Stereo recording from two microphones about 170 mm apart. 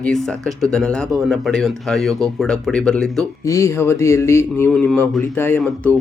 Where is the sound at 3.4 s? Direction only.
15° left (ahead or behind).